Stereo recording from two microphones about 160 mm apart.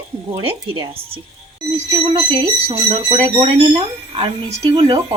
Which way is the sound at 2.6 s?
35° right (ahead or behind).